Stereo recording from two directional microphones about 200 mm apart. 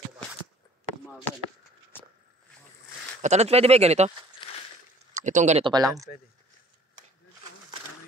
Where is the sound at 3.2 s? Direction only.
35° right (ahead or behind).